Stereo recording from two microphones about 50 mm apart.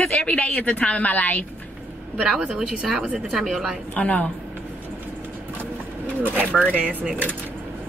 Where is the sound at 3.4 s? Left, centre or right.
Centre.